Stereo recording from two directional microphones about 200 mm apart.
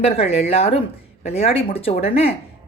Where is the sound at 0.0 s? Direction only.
30° left (ahead or behind).